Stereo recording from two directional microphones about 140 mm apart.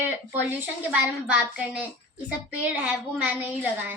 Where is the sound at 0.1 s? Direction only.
15° right (ahead or behind).